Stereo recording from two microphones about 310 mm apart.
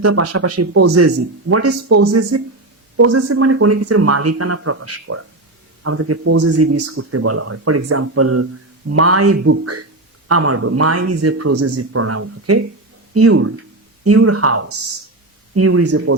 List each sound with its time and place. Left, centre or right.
0.0 s speech: right